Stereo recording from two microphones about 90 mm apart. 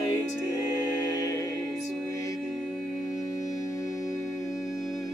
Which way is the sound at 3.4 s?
40° left (ahead or behind).